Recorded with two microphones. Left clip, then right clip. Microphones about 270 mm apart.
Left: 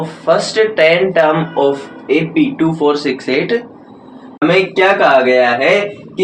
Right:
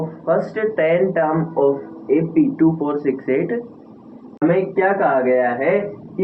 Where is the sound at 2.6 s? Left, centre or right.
Left.